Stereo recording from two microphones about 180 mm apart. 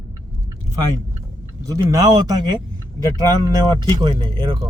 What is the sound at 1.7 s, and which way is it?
Speech, 20° right (ahead or behind).